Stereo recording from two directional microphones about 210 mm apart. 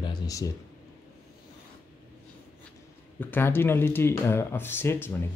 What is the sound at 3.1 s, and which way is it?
Speech, 10° left (ahead or behind).